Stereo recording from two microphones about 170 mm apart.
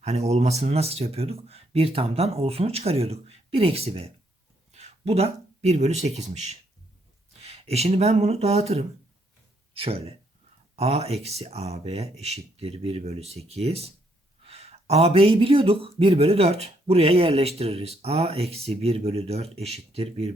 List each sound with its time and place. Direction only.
0.0 s speech: 40° right (ahead or behind)